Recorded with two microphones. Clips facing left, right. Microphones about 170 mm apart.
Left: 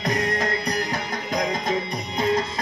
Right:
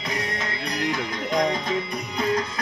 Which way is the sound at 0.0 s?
40° left (ahead or behind).